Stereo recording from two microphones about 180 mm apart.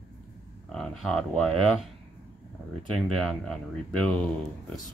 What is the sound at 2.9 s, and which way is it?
Speech, 5° left (ahead or behind).